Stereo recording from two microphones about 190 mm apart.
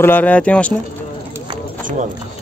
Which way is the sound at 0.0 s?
10° left (ahead or behind).